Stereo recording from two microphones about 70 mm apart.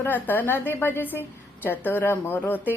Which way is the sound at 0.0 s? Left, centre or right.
Left.